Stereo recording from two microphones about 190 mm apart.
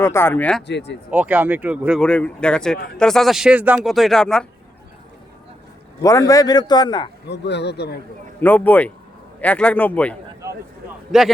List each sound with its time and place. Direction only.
0.0 s speech: 15° left (ahead or behind)
0.7 s speech: 65° left (ahead or behind)
1.1 s speech: 10° right (ahead or behind)
2.0 s speech: 5° left (ahead or behind)
6.0 s a man's voice: 15° left (ahead or behind)
7.3 s speech: 65° left (ahead or behind)
8.4 s speech: 10° left (ahead or behind)
10.4 s a sound: 15° right (ahead or behind)
11.1 s speech: centre (ahead or behind)